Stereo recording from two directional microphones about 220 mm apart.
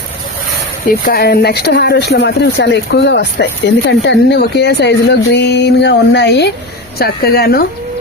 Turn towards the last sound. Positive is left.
turn(degrees=45)  # may be behind; listen again after turning